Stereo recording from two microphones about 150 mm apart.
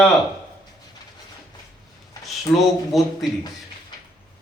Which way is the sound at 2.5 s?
5° left (ahead or behind).